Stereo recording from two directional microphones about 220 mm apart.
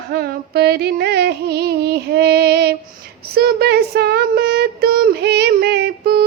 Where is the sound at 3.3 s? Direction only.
45° right (ahead or behind).